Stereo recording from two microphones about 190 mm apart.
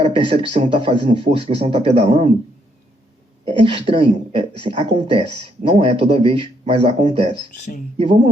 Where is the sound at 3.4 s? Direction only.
30° right (ahead or behind).